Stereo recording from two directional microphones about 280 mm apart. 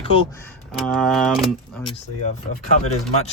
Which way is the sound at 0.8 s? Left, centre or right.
Centre.